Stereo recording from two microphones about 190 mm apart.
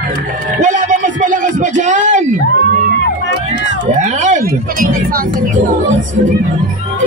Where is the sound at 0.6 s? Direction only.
40° right (ahead or behind).